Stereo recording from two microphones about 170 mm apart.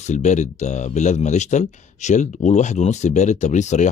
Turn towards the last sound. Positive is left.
turn(degrees=45)  # may be behind; listen again after turning